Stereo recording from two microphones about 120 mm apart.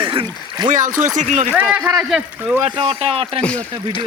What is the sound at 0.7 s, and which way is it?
Speech, 90° right.